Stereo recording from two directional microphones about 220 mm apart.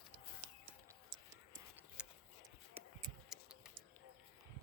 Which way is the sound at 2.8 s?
25° right (ahead or behind).